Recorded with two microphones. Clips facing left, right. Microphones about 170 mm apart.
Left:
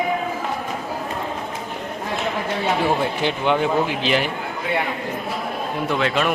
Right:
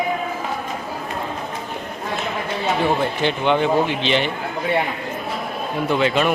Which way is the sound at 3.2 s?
5° left (ahead or behind).